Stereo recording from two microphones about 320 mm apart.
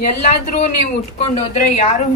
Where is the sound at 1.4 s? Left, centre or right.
Left.